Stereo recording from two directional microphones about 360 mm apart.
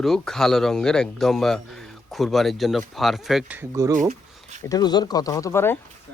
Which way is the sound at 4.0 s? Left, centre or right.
Centre.